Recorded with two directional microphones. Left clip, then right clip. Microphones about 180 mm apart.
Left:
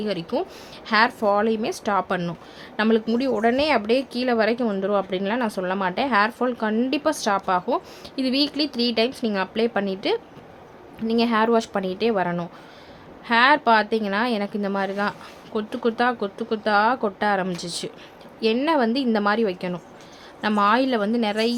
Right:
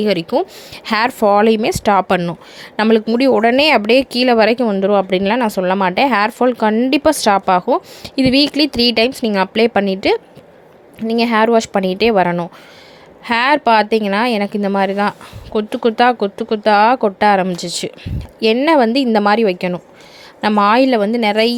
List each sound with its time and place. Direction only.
0.0 s a woman's voice: 40° right (ahead or behind)